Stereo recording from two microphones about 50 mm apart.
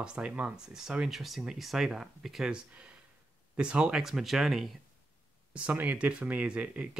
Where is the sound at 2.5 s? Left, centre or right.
Centre.